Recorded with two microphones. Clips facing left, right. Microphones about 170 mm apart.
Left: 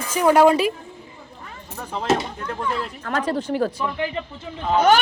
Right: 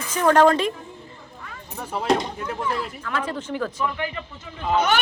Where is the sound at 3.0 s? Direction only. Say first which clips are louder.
Left 4 dB; 40° left (ahead or behind).